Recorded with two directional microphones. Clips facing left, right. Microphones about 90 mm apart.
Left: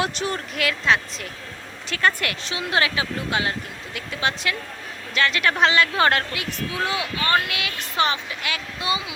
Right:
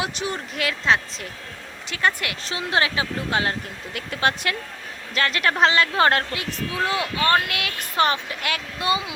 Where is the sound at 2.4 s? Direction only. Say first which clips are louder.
Right 1 dB; 30° right (ahead or behind); by 4.6 s 50° right (ahead or behind).